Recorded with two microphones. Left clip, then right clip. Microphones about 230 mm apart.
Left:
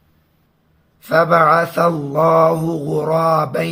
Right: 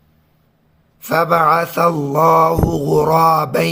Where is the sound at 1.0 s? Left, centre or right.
Right.